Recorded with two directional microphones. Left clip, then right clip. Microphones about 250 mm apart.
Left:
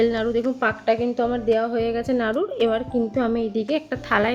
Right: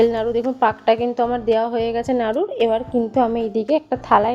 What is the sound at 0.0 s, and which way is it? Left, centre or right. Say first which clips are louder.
A woman's voice: right 3 dB; centre.